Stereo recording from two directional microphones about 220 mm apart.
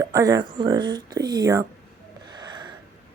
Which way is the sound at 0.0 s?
15° right (ahead or behind).